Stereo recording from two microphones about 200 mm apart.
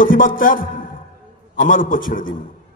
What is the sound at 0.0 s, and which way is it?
A man's voice, 45° left (ahead or behind).